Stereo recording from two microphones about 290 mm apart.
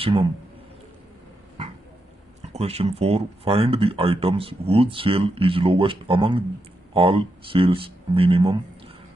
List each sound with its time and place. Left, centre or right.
0.0 s speech: centre
2.5 s speech: right